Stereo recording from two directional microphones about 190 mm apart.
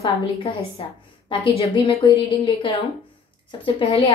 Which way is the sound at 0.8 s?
30° left (ahead or behind).